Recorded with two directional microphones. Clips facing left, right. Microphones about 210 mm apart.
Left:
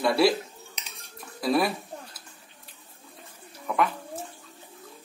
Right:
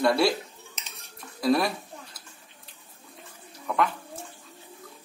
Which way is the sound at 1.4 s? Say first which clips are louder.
Right 1 dB; centre (ahead or behind).